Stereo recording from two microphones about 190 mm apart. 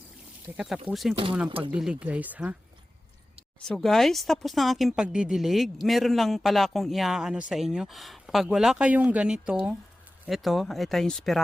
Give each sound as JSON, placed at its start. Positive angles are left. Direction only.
{"t": 0.5, "sound": "a woman's voice", "side_deg": 0}
{"t": 1.5, "sound": "speech", "side_deg": -25}
{"t": 1.7, "sound": "speech", "side_deg": -5}
{"t": 3.7, "sound": "a woman's voice", "side_deg": 0}